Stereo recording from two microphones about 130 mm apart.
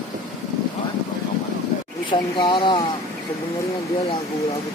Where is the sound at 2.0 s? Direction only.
40° left (ahead or behind).